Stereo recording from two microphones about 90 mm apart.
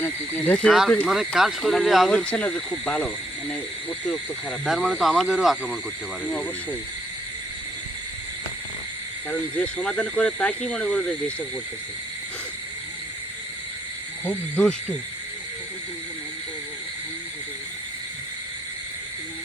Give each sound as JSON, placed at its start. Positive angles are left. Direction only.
{"t": 0.0, "sound": "speech", "side_deg": 20}
{"t": 0.7, "sound": "speech", "side_deg": 0}
{"t": 2.0, "sound": "speech", "side_deg": 10}
{"t": 4.6, "sound": "speech", "side_deg": -5}
{"t": 6.2, "sound": "speech", "side_deg": 15}
{"t": 9.3, "sound": "speech", "side_deg": 15}
{"t": 14.3, "sound": "speech", "side_deg": 15}